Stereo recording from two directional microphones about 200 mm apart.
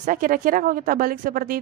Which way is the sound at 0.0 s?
40° right (ahead or behind).